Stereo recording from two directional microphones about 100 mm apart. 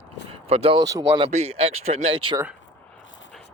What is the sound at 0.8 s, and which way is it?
Speech, 35° right (ahead or behind).